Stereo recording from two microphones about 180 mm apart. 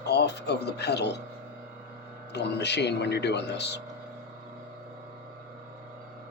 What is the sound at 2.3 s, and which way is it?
Speech, 70° left (ahead or behind).